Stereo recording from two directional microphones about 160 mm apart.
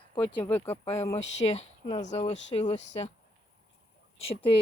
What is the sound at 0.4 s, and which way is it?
Speech, 15° left (ahead or behind).